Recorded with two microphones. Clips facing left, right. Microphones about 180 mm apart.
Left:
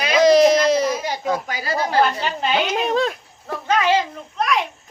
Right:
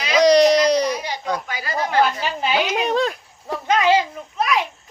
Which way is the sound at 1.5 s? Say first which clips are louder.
Left 2 dB; 40° left (ahead or behind).